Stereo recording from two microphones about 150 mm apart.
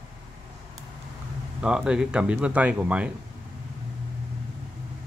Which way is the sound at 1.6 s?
5° right (ahead or behind).